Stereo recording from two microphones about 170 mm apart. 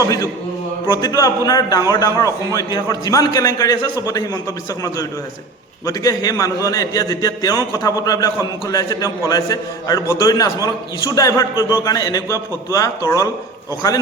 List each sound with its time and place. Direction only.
0.0 s a man's voice: 20° left (ahead or behind)
5.8 s a man's voice: 20° left (ahead or behind)